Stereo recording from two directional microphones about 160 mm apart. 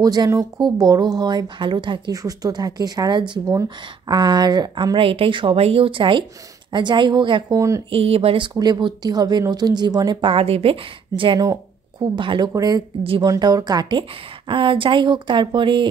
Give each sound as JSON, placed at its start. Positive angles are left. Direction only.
{"t": 0.0, "sound": "a woman's voice", "side_deg": -25}
{"t": 7.9, "sound": "a woman's voice", "side_deg": -40}
{"t": 8.5, "sound": "speech", "side_deg": -25}
{"t": 13.0, "sound": "a woman's voice", "side_deg": -35}
{"t": 13.3, "sound": "a woman's voice", "side_deg": -25}